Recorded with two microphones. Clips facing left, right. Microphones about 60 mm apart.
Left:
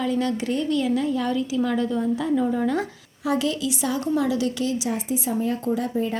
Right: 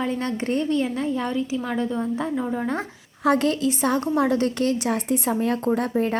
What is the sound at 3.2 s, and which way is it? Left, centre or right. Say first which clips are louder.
A woman's voice: right 4 dB; right.